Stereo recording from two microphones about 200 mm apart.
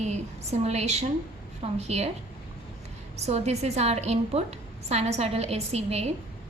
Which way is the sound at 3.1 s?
35° right (ahead or behind).